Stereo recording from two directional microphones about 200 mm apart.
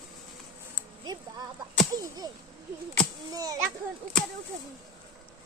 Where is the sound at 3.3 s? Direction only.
15° right (ahead or behind).